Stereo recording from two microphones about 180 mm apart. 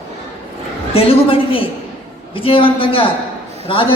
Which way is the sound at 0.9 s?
30° left (ahead or behind).